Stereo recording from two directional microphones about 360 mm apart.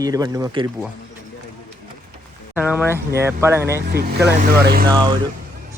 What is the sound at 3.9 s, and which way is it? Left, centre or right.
Speech, right.